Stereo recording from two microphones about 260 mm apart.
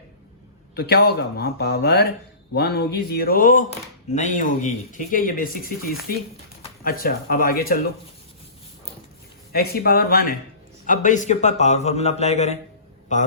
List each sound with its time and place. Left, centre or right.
0.8 s a man's voice: left
9.5 s a man's voice: left